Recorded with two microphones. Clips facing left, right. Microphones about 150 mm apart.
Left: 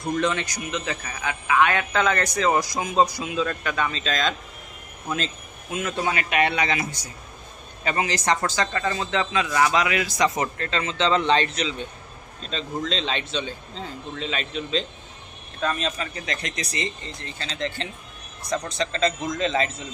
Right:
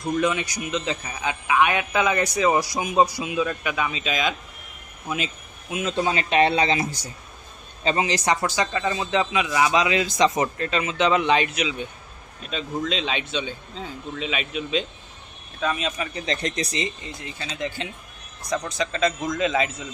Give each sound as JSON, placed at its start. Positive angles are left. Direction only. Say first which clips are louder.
{"t": 0.0, "sound": "a man's voice", "louder": "right 1 dB", "side_deg": -5}
{"t": 5.7, "sound": "a man's voice", "louder": "right 2 dB", "side_deg": -20}
{"t": 7.9, "sound": "a man's voice", "louder": "right 1 dB", "side_deg": -20}
{"t": 16.1, "sound": "a man's voice", "louder": "right 5 dB", "side_deg": -30}
{"t": 16.8, "sound": "a man's voice", "louder": "right 1 dB", "side_deg": -10}